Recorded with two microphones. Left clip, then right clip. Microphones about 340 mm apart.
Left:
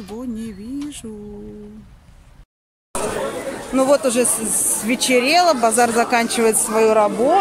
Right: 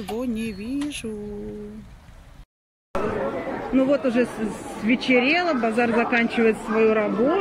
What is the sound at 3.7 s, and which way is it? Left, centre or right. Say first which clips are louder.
Speech: left 5 dB; centre.